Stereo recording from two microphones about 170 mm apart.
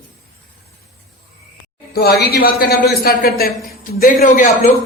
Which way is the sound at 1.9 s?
65° left (ahead or behind).